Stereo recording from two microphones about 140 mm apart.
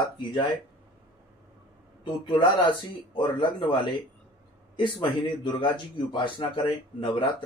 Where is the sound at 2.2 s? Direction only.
35° left (ahead or behind).